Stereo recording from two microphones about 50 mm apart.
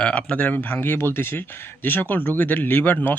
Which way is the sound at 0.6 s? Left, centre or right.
Left.